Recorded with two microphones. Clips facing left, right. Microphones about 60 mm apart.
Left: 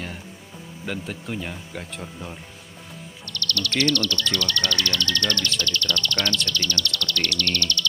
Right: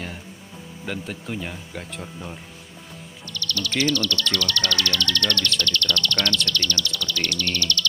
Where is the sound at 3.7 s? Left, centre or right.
Centre.